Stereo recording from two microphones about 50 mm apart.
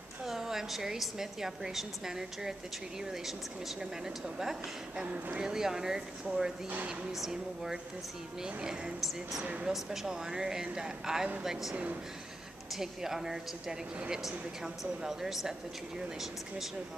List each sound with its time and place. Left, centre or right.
0.2 s a woman's voice: centre
5.0 s speech: right
5.4 s speech: centre
12.7 s speech: centre